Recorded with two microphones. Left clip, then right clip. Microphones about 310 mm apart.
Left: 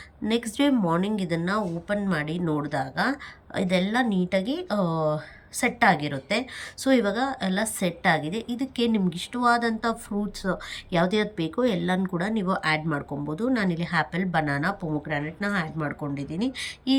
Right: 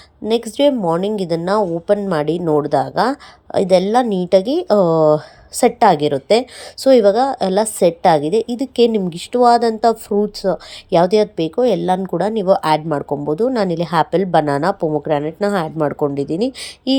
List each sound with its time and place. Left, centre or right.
0.3 s a woman's voice: centre
13.0 s speech: right
13.5 s a woman's voice: centre